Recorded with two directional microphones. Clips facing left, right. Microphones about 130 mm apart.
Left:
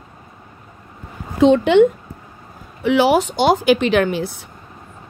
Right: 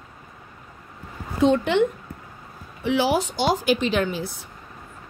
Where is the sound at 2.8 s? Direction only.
75° left (ahead or behind).